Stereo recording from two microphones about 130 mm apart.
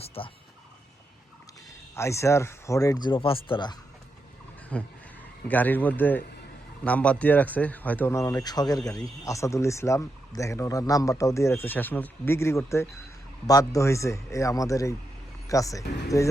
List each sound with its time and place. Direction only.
0.0 s turkey: 50° left (ahead or behind)
2.0 s a man's voice: 20° left (ahead or behind); by 3.8 s 40° left (ahead or behind)
4.7 s a man's voice: 10° left (ahead or behind); by 16.3 s 25° left (ahead or behind)